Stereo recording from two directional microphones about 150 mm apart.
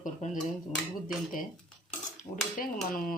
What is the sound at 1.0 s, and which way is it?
Dishes, 65° left (ahead or behind).